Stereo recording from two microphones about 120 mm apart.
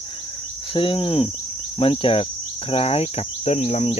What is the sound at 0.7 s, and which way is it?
Cricket, 45° left (ahead or behind).